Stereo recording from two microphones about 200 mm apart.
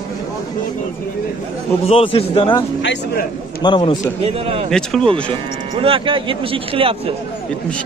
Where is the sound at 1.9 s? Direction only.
30° left (ahead or behind).